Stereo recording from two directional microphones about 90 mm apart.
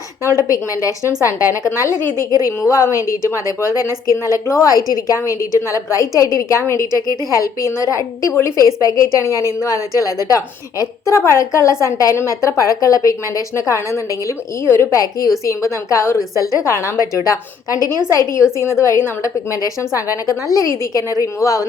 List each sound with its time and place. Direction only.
0.5 s a woman's voice: 35° left (ahead or behind)